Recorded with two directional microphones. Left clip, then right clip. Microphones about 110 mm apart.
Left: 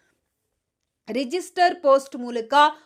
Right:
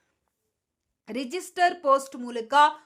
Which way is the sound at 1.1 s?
35° left (ahead or behind).